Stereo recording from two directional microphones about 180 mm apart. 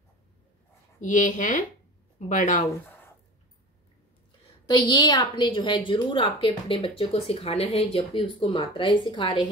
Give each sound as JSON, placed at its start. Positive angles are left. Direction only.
{"t": 1.0, "sound": "speech", "side_deg": 45}
{"t": 2.7, "sound": "a sound", "side_deg": 10}
{"t": 4.6, "sound": "a woman's voice", "side_deg": 25}